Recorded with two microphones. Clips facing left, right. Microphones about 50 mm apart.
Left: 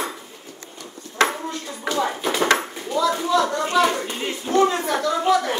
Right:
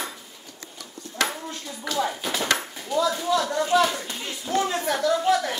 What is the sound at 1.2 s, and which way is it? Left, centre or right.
Dishes, left.